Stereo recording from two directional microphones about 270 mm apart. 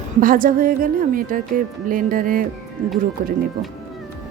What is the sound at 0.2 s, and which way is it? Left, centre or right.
Speech, right.